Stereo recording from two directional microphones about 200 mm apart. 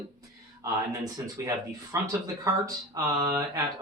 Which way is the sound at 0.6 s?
15° right (ahead or behind).